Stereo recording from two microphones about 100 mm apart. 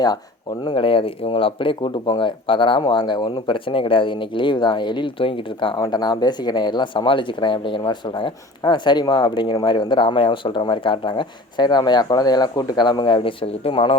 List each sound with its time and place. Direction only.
0.6 s speech: 55° left (ahead or behind)
5.8 s speech: 45° left (ahead or behind); by 14.0 s 65° left (ahead or behind)